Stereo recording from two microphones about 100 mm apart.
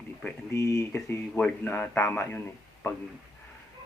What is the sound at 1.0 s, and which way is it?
Speech, 20° left (ahead or behind).